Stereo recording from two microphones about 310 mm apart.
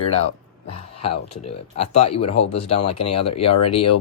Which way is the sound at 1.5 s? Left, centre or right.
Centre.